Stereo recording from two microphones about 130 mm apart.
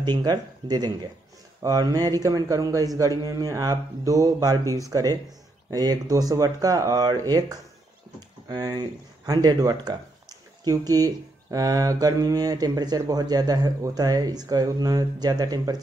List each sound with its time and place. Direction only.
0.0 s a man's voice: 35° right (ahead or behind)